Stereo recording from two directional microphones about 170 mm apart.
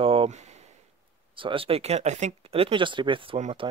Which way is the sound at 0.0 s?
30° right (ahead or behind).